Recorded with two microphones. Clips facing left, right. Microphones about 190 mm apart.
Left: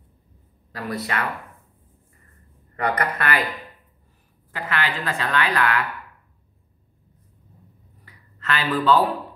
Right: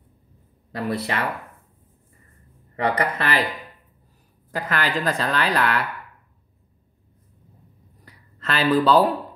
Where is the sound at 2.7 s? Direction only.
25° right (ahead or behind).